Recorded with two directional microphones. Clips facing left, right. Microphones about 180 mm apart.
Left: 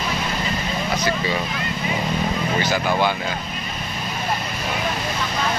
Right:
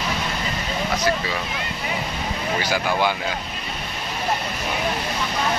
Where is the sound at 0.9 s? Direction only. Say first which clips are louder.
Even; centre (ahead or behind).